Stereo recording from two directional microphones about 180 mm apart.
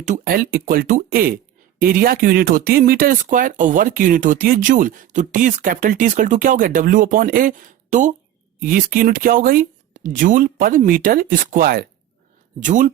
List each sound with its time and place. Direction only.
0.1 s speech: 55° right (ahead or behind)